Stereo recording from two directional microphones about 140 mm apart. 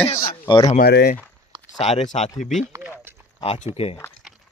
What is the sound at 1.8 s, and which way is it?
Speech, 50° left (ahead or behind).